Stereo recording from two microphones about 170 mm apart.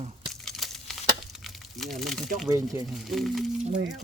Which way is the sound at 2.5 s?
20° right (ahead or behind).